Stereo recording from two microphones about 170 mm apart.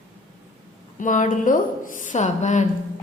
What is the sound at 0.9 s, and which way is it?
A woman's voice, 50° left (ahead or behind).